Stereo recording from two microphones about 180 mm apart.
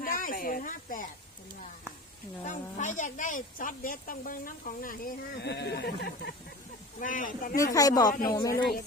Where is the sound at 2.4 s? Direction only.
45° left (ahead or behind); by 6.3 s 65° left (ahead or behind).